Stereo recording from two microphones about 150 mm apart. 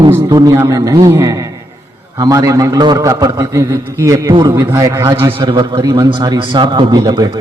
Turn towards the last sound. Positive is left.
turn(degrees=-30)  # may be behind; listen again after turning